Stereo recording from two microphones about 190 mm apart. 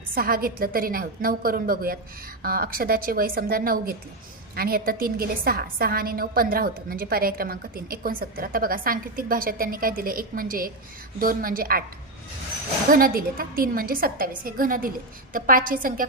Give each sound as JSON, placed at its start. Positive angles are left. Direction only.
{"t": 0.1, "sound": "a woman's voice", "side_deg": -50}
{"t": 12.9, "sound": "a woman's voice", "side_deg": -50}